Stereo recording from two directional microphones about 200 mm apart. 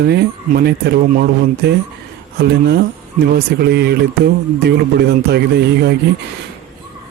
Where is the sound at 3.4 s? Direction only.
55° right (ahead or behind).